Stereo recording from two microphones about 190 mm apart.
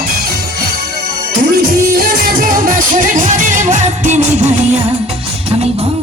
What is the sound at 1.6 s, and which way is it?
Music, 50° right (ahead or behind).